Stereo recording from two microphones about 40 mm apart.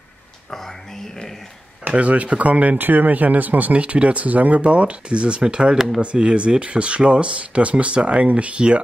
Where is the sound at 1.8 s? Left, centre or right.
Right.